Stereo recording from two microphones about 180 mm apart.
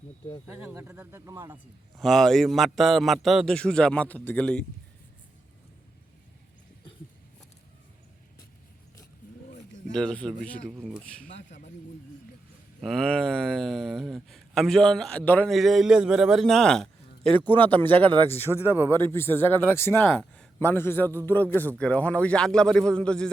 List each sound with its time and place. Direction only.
0.4 s speech: 15° right (ahead or behind)
2.0 s a man's voice: centre (ahead or behind)
9.9 s a man's voice: 5° left (ahead or behind)
11.4 s a sound: 40° left (ahead or behind)
12.8 s a man's voice: 5° left (ahead or behind)
18.6 s speech: 10° right (ahead or behind)
18.9 s a man's voice: 15° left (ahead or behind)